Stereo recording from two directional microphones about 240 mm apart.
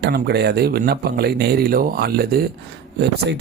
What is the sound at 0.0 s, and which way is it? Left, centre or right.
Speech, right.